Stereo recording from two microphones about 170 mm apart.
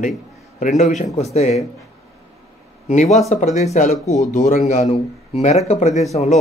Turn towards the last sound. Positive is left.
turn(degrees=40)  # may be behind; listen again after turning